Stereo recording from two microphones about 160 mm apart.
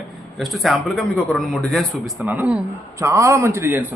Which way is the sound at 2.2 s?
10° right (ahead or behind).